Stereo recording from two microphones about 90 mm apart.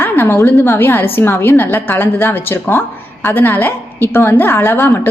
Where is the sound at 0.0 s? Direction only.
25° left (ahead or behind).